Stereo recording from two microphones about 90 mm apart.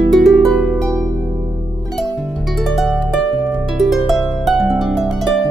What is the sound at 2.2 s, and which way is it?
Harp, centre (ahead or behind).